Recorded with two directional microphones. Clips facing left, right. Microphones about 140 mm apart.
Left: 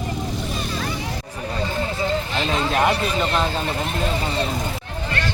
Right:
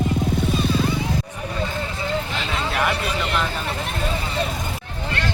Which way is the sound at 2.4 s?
25° left (ahead or behind).